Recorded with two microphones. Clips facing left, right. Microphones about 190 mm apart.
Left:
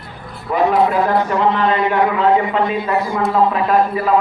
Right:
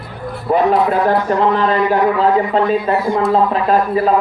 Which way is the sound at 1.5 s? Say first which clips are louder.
Right 1 dB; 35° right (ahead or behind).